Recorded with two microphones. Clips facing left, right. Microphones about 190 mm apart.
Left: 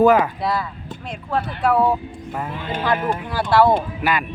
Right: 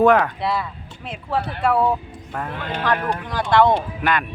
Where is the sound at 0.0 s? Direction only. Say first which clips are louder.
Left 1 dB; centre (ahead or behind).